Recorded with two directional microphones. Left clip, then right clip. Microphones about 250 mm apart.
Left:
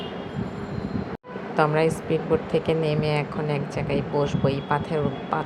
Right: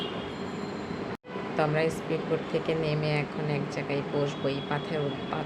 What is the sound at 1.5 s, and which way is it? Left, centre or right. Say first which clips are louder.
A woman's voice: left 6 dB; centre.